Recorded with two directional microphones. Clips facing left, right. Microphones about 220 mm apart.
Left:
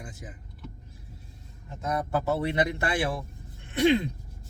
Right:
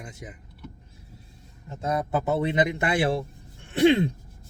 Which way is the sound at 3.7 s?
30° right (ahead or behind).